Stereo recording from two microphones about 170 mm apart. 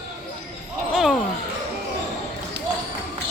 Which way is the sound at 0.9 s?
Centre (ahead or behind).